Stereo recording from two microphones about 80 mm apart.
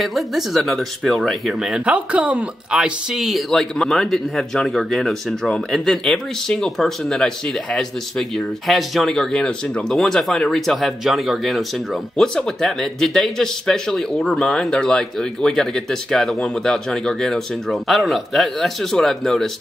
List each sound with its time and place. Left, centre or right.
0.0 s speech: centre
1.9 s speech: centre
3.2 s speech: centre